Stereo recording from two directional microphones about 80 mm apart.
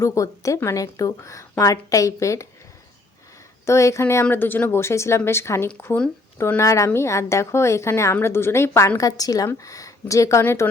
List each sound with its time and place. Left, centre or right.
0.0 s a woman's voice: left
3.7 s a woman's voice: left
4.8 s a woman's voice: left
9.0 s a woman's voice: left